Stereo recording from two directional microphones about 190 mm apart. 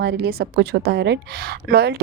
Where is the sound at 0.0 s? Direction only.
60° right (ahead or behind).